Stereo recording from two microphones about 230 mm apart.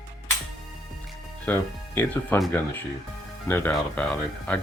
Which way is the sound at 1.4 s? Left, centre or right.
Centre.